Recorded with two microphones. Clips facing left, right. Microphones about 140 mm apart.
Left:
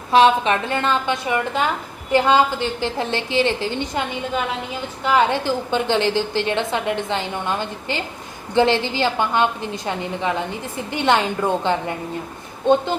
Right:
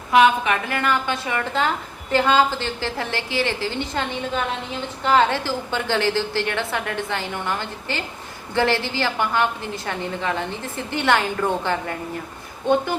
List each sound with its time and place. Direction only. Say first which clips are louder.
0.1 s a woman's voice: left 2 dB; 30° left (ahead or behind)
5.0 s a woman's voice: left 1 dB; 15° left (ahead or behind)